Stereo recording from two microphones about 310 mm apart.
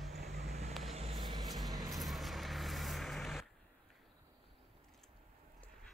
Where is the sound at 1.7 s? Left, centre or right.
Centre.